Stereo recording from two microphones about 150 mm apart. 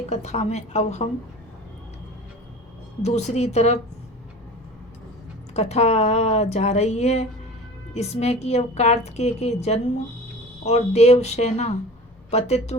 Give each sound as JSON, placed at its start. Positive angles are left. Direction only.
{"t": 0.1, "sound": "a woman's voice", "side_deg": 50}
{"t": 3.0, "sound": "a woman's voice", "side_deg": 50}
{"t": 5.5, "sound": "a woman's voice", "side_deg": 45}